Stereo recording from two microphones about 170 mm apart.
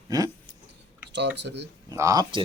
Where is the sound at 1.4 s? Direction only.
85° right.